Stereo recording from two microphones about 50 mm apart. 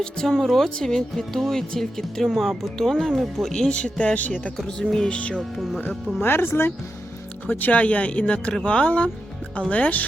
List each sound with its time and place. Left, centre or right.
0.0 s speech: centre
3.5 s speech: centre
4.5 s speech: centre
5.0 s speech: left
5.4 s speech: centre
6.2 s speech: left
7.4 s speech: left